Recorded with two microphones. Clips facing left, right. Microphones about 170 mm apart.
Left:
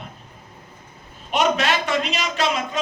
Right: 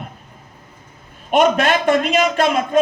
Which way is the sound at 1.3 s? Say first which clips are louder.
Right 6 dB; 50° right (ahead or behind).